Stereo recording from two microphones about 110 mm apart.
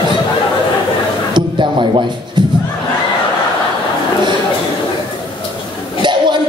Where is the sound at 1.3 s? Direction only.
45° right (ahead or behind).